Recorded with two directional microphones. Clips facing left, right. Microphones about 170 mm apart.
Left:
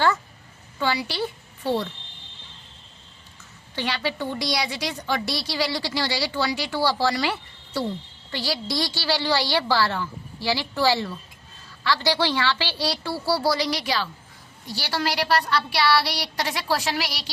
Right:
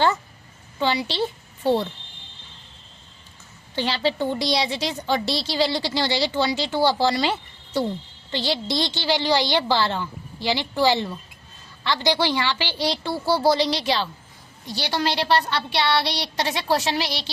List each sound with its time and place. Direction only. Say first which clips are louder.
0.8 s a woman's voice: right 2 dB; 25° right (ahead or behind)
3.8 s a woman's voice: right 4 dB; 30° right (ahead or behind)